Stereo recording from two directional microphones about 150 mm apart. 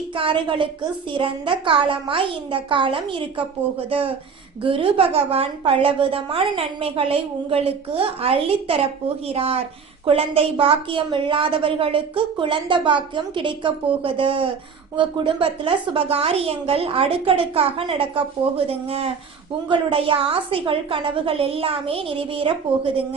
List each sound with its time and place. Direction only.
0.2 s a woman's voice: 35° right (ahead or behind)